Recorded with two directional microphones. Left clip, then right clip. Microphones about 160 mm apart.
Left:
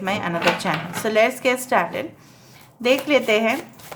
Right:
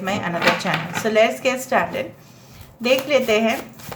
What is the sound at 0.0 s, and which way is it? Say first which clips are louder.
Speech: right 1 dB; 30° left (ahead or behind).